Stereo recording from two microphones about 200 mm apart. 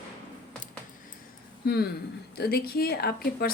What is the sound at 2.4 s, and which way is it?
A woman's voice, 50° left (ahead or behind).